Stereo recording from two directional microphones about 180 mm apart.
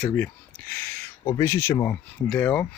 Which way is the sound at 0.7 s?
15° left (ahead or behind).